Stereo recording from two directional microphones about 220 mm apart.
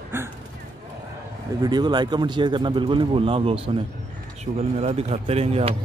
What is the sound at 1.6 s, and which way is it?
Speech, 20° right (ahead or behind).